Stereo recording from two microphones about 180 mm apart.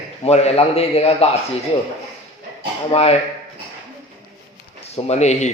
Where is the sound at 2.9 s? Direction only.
35° left (ahead or behind).